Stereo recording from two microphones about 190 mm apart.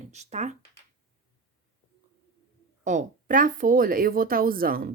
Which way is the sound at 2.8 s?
45° right (ahead or behind).